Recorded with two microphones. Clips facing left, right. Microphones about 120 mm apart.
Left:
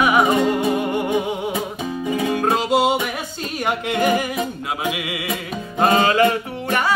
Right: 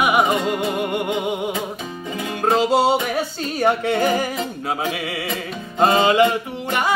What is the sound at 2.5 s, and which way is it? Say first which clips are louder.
Music: right 4 dB; 30° right (ahead or behind).